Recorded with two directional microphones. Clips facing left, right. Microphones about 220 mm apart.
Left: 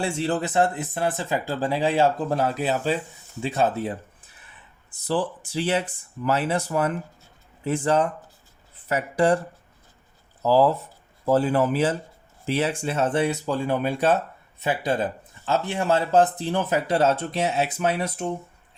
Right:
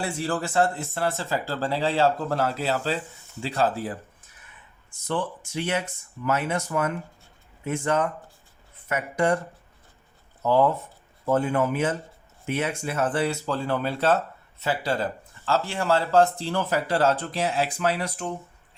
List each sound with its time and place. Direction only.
0.0 s speech: 25° left (ahead or behind)
4.9 s speech: 35° left (ahead or behind)
10.4 s speech: 35° left (ahead or behind)